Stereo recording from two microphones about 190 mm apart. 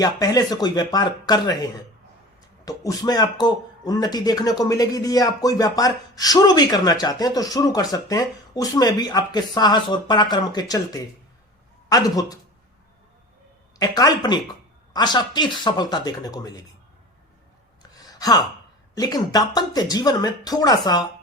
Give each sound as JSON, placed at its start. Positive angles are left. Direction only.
{"t": 0.0, "sound": "a man's voice", "side_deg": 20}
{"t": 2.6, "sound": "a man's voice", "side_deg": 20}
{"t": 13.7, "sound": "a man's voice", "side_deg": 20}
{"t": 17.9, "sound": "a sound", "side_deg": 20}
{"t": 18.9, "sound": "a man's voice", "side_deg": 20}